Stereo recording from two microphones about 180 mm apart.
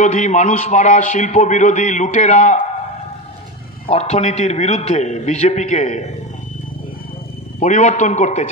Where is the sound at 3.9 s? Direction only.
40° left (ahead or behind).